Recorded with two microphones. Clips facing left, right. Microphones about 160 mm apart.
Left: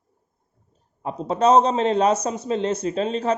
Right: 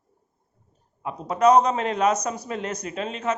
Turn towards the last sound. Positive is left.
turn(degrees=35)  # may be behind; listen again after turning